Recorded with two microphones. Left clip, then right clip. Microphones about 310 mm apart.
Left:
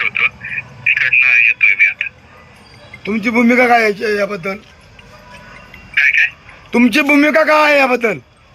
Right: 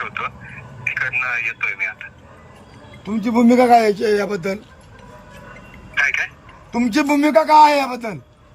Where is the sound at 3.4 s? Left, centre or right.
Centre.